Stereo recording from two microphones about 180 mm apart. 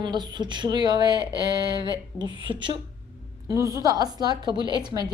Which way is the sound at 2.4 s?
25° right (ahead or behind).